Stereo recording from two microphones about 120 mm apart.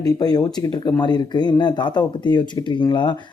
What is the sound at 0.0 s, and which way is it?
Speech, 35° left (ahead or behind).